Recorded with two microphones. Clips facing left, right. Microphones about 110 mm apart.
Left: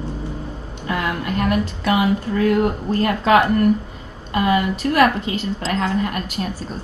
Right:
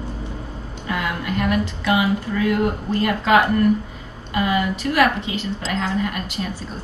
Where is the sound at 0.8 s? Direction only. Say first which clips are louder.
Left 2 dB; 45° left (ahead or behind).